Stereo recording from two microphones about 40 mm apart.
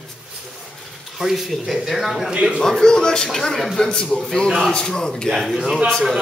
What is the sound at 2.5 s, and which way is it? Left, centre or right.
A man's voice, centre.